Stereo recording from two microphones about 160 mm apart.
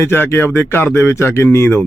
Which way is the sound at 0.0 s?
15° left (ahead or behind).